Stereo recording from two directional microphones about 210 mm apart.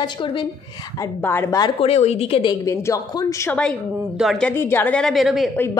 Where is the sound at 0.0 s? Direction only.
20° left (ahead or behind).